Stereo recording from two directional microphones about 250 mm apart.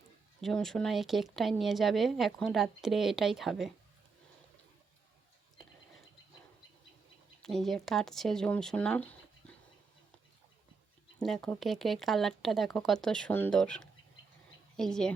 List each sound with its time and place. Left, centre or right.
0.4 s speech: centre
7.4 s speech: centre
11.2 s speech: centre